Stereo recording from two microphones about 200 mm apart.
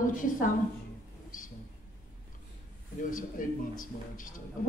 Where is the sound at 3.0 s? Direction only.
40° left (ahead or behind).